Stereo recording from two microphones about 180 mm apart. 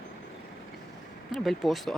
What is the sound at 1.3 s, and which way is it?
Speech, centre (ahead or behind).